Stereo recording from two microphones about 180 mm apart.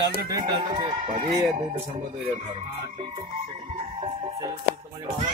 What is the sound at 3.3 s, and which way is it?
Music, 35° right (ahead or behind).